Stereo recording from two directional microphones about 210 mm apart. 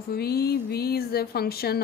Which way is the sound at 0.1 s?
50° left (ahead or behind).